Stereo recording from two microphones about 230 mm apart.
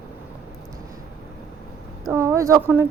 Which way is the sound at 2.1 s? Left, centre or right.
Centre.